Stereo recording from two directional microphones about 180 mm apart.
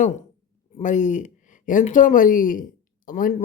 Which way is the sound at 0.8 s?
45° left (ahead or behind).